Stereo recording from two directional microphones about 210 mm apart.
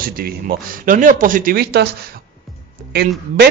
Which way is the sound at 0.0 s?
45° right (ahead or behind).